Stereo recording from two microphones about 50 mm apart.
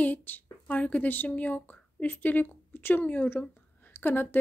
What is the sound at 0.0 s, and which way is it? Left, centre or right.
A woman's voice, left.